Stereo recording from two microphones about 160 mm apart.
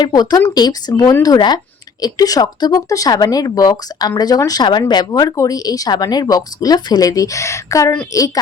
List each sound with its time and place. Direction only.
0.0 s speech: 25° left (ahead or behind)